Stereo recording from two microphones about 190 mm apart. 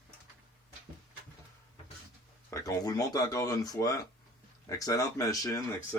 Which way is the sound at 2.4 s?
15° left (ahead or behind).